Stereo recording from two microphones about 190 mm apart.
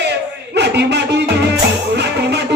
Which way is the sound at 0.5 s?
65° right (ahead or behind).